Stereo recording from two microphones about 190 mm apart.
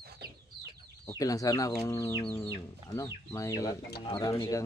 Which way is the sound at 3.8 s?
60° left (ahead or behind).